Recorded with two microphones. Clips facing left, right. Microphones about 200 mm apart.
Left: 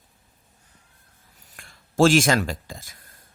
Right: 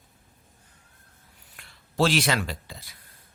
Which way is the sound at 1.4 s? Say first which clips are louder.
Left 4 dB; 45° left (ahead or behind).